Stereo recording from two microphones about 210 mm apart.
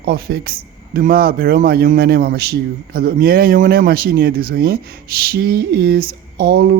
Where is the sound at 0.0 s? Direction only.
50° right (ahead or behind).